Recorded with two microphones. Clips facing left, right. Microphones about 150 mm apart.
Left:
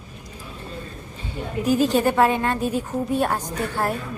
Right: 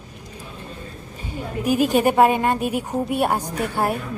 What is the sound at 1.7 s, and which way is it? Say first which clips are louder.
A woman's voice: right 1 dB; 10° right (ahead or behind).